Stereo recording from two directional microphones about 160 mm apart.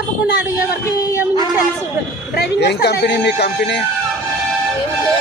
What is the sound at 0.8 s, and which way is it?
Speech, 20° left (ahead or behind).